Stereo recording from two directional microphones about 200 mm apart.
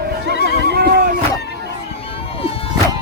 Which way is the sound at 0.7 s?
50° right (ahead or behind).